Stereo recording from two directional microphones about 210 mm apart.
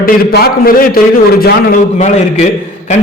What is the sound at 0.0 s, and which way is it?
A man's voice, 45° left (ahead or behind).